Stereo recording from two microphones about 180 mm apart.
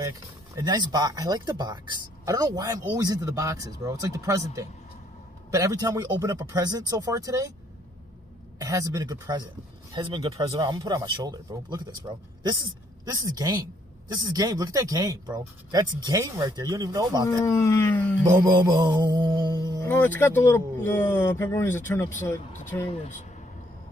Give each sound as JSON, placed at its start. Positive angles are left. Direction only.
{"t": 0.6, "sound": "speech", "side_deg": -20}
{"t": 8.5, "sound": "speech", "side_deg": -20}
{"t": 17.5, "sound": "speech", "side_deg": 15}
{"t": 18.1, "sound": "speech", "side_deg": -15}
{"t": 18.9, "sound": "music", "side_deg": -20}
{"t": 19.8, "sound": "speech", "side_deg": 10}